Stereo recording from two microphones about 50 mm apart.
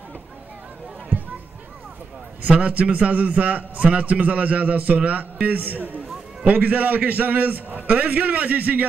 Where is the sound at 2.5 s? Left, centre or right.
Right.